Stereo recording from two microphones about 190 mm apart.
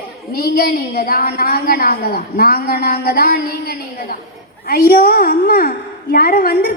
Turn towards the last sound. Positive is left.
turn(degrees=50)  # may be behind; listen again after turning